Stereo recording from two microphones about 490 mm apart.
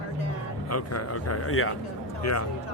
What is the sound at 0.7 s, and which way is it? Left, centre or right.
Speech, left.